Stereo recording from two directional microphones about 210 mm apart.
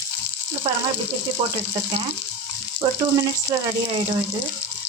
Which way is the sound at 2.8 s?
20° right (ahead or behind).